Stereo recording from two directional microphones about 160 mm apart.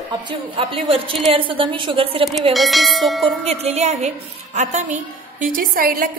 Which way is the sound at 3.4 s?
40° right (ahead or behind).